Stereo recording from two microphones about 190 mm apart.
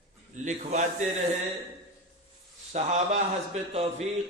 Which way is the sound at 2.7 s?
35° right (ahead or behind).